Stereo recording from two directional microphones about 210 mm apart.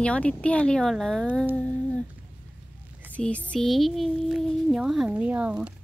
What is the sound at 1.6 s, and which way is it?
Humming, 5° left (ahead or behind).